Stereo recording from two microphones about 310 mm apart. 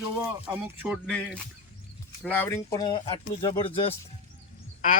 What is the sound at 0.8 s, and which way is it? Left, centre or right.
Speech, centre.